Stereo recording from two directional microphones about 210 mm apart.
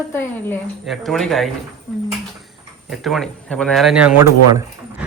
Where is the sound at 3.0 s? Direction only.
Centre (ahead or behind).